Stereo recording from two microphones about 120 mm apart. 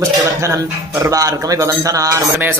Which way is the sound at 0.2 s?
25° right (ahead or behind).